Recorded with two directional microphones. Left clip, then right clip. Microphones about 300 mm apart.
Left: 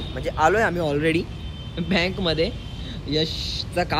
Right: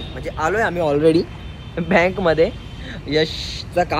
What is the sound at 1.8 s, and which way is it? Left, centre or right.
Speech, centre.